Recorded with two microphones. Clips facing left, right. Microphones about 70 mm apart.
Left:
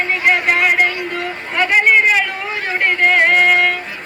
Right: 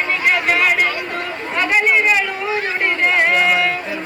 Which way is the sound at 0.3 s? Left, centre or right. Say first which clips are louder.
Left 2 dB; left.